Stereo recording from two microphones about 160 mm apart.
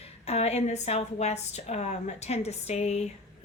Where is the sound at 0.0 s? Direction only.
40° left (ahead or behind).